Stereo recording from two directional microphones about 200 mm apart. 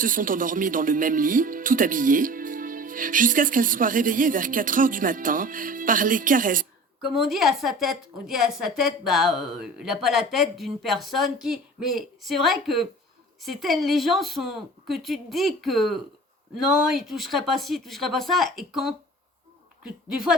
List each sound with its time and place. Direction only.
0.0 s speech: 45° right (ahead or behind)
7.1 s a woman's voice: centre (ahead or behind)